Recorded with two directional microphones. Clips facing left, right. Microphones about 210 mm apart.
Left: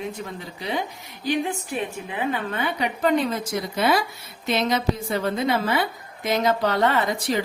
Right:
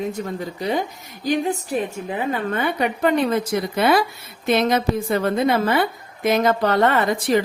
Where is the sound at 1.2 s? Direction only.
40° right (ahead or behind).